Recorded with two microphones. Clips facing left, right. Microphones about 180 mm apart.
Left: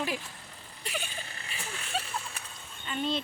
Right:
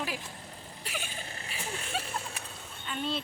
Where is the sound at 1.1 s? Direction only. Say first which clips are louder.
Right 1 dB; 40° right (ahead or behind).